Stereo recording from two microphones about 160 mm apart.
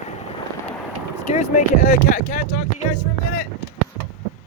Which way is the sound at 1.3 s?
50° left (ahead or behind).